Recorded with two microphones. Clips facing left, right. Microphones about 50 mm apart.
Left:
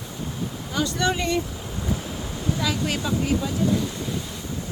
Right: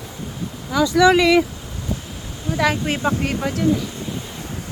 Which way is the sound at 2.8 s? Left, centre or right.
Right.